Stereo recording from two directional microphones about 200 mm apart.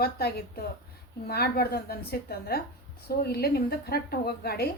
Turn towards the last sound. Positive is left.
turn(degrees=50)  # may be behind; listen again after turning